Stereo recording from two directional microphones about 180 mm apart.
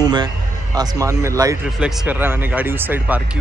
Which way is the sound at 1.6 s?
5° right (ahead or behind).